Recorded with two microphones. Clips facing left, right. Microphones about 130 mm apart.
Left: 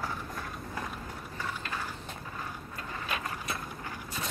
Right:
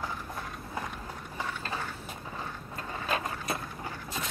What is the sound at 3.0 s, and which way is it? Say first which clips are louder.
Vehicle: right 4 dB; 35° right (ahead or behind).